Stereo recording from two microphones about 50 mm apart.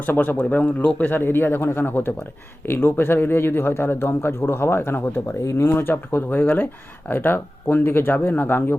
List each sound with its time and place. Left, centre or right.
0.0 s a man's voice: left
2.6 s a man's voice: left
5.4 s speech: left
5.8 s a man's voice: left